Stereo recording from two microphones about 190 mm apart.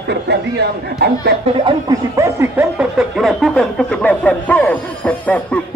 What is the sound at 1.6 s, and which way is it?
Speech, 20° right (ahead or behind).